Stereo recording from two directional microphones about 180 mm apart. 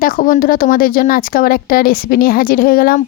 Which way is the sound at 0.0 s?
50° left (ahead or behind).